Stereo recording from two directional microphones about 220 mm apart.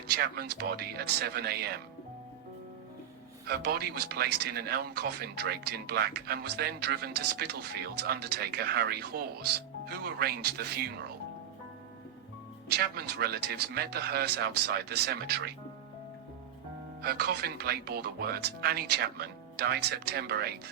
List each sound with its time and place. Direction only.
0.2 s speech: 45° right (ahead or behind)
3.4 s speech: 45° right (ahead or behind)
12.6 s speech: 45° right (ahead or behind)
17.0 s speech: 45° right (ahead or behind)